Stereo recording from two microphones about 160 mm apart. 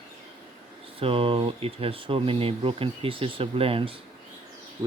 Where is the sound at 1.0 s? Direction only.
35° right (ahead or behind).